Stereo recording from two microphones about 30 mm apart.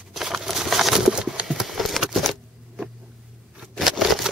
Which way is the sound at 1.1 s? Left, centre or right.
Right.